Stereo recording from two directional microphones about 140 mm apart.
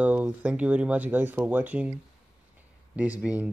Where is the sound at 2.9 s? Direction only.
10° right (ahead or behind).